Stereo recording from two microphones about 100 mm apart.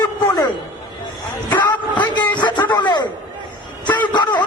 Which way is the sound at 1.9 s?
50° left (ahead or behind).